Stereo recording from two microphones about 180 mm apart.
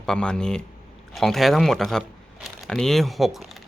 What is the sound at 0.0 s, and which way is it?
Speech, 5° left (ahead or behind).